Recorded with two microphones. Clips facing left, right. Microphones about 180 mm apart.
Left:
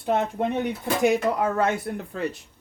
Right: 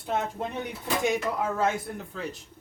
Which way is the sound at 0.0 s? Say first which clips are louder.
Left 6 dB; 65° left (ahead or behind).